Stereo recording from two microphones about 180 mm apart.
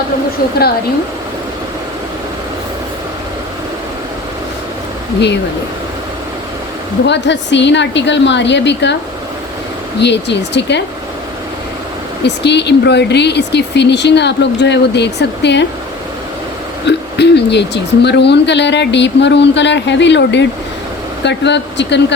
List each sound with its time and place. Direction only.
7.0 s a woman's voice: 75° left (ahead or behind)
10.0 s speech: 75° left (ahead or behind)
12.2 s speech: 70° left (ahead or behind)
16.8 s speech: 70° left (ahead or behind)